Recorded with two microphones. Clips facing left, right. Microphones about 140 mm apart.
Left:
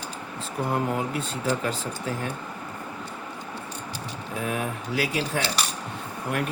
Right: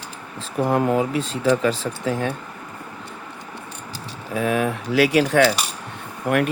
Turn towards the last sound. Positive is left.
turn(degrees=-80)